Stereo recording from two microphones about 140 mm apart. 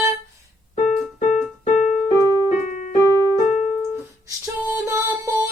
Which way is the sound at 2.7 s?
65° left (ahead or behind).